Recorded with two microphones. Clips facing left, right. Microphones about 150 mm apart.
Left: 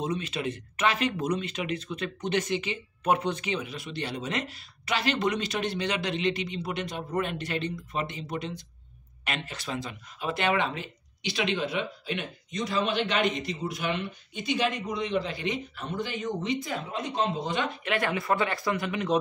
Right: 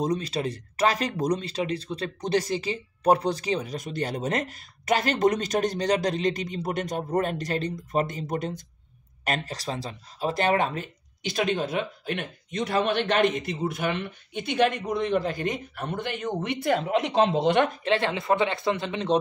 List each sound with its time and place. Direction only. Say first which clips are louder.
0.0 s speech: right 4 dB; 40° right (ahead or behind); by 17.6 s 75° right (ahead or behind)
17.8 s speech: right 3 dB; 25° right (ahead or behind)